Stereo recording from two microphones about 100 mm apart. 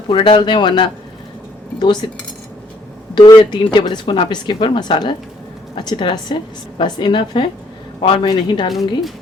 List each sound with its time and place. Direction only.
0.1 s speech: 55° left (ahead or behind)
3.2 s speech: 45° left (ahead or behind)